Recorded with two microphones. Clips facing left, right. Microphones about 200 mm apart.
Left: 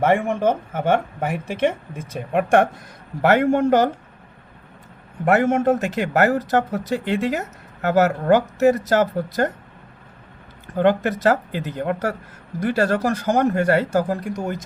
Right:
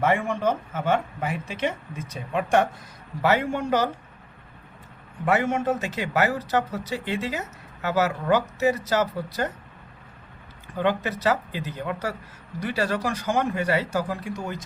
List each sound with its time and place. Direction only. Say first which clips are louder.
0.0 s a man's voice: left 5 dB; 50° left (ahead or behind)
5.2 s a man's voice: left 6 dB; 55° left (ahead or behind)
10.8 s speech: left 7 dB; 50° left (ahead or behind)